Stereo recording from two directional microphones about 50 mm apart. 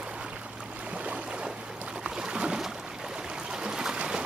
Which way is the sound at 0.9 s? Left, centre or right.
Right.